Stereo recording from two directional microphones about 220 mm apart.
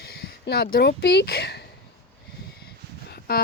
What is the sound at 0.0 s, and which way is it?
Speech, 45° left (ahead or behind).